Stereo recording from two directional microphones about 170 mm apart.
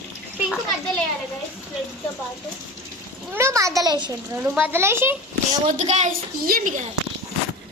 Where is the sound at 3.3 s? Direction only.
15° right (ahead or behind).